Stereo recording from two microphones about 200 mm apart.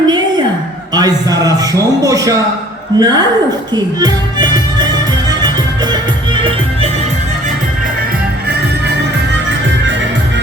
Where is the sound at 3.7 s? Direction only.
20° right (ahead or behind).